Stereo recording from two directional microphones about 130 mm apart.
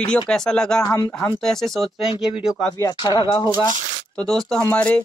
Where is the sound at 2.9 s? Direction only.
35° left (ahead or behind).